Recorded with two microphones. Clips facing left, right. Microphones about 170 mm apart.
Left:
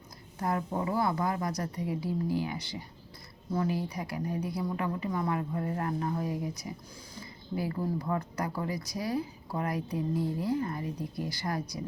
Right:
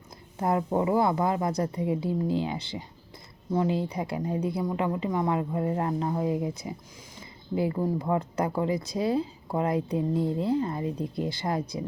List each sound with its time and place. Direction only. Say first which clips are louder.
0.3 s speech: right 6 dB; 25° right (ahead or behind)